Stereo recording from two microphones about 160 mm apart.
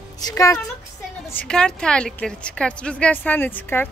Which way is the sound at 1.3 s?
5° left (ahead or behind).